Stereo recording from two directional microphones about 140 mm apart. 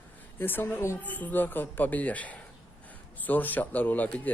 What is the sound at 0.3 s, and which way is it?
Speech, 15° left (ahead or behind).